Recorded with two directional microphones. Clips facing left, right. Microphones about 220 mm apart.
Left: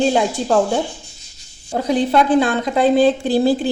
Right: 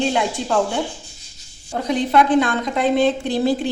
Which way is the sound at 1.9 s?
35° left (ahead or behind).